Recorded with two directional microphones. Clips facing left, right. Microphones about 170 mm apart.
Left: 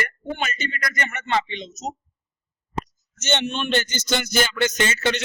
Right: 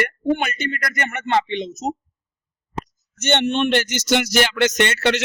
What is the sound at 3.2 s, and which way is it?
Music, 60° right (ahead or behind).